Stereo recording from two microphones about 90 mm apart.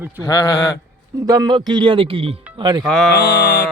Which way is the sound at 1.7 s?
65° right (ahead or behind).